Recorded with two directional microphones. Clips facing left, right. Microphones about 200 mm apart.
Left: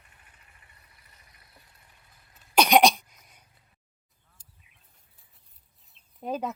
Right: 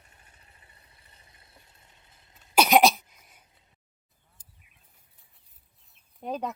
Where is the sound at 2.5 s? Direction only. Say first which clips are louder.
Even; 5° right (ahead or behind).